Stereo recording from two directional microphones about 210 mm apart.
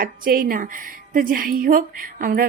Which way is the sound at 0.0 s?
45° right (ahead or behind).